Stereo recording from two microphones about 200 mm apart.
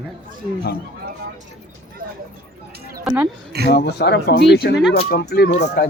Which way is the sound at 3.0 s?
10° right (ahead or behind).